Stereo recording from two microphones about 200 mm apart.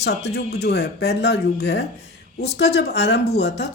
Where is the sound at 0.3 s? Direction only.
55° left (ahead or behind).